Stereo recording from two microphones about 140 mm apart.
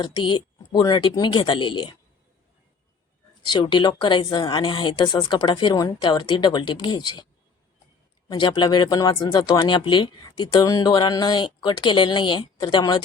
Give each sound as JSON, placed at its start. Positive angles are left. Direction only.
{"t": 0.0, "sound": "speech", "side_deg": 35}
{"t": 3.4, "sound": "speech", "side_deg": 35}
{"t": 8.3, "sound": "speech", "side_deg": 35}